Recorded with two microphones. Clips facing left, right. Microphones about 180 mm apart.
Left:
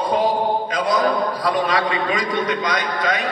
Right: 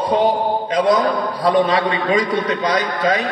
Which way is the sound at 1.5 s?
35° right (ahead or behind).